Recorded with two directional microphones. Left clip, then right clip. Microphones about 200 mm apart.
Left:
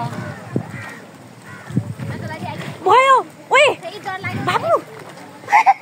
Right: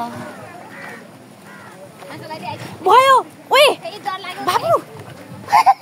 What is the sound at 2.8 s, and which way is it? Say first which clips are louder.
Speech: right 1 dB; 10° right (ahead or behind).